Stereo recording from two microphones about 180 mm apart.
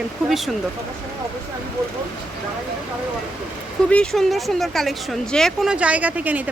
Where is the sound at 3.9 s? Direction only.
5° left (ahead or behind).